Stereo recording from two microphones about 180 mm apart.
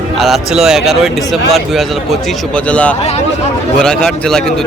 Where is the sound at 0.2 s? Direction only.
Centre (ahead or behind).